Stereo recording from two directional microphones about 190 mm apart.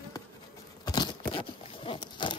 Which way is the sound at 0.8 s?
20° left (ahead or behind).